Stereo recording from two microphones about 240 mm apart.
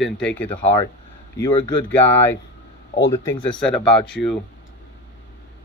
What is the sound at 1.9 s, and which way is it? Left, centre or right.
Speech, centre.